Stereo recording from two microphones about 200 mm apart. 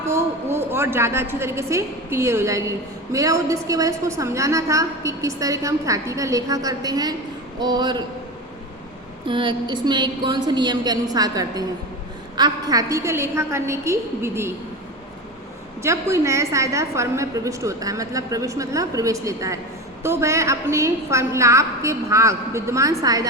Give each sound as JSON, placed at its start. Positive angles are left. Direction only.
{"t": 0.5, "sound": "a woman's voice", "side_deg": -10}
{"t": 9.2, "sound": "a woman's voice", "side_deg": -25}
{"t": 15.8, "sound": "a woman's voice", "side_deg": -15}